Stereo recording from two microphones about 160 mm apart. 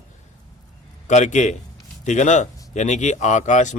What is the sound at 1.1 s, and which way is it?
Speech, 50° left (ahead or behind).